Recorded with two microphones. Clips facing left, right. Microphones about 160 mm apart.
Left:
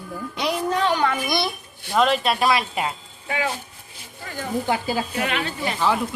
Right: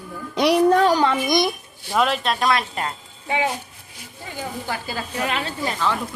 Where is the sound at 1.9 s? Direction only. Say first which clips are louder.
Left 1 dB; centre (ahead or behind).